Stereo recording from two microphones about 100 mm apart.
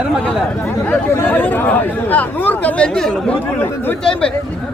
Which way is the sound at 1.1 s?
20° left (ahead or behind).